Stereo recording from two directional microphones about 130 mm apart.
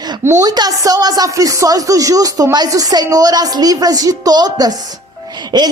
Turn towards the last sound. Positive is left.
turn(degrees=-35)  # may be behind; listen again after turning